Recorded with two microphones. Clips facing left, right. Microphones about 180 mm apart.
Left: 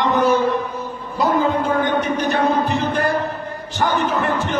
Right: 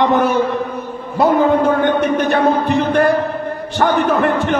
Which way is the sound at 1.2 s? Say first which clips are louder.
Right 6 dB; 60° right (ahead or behind).